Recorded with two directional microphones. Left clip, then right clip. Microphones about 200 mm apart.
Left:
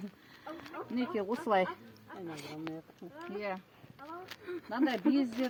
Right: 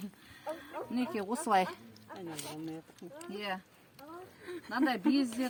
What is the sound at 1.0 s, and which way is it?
Speech, 25° right (ahead or behind).